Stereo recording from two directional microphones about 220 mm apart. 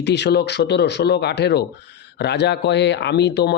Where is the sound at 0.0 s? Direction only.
50° left (ahead or behind).